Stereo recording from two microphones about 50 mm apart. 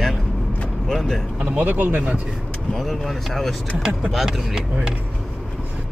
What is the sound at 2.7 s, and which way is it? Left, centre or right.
Speech, centre.